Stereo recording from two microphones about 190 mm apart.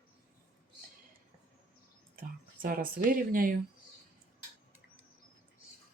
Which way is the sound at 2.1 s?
45° right (ahead or behind).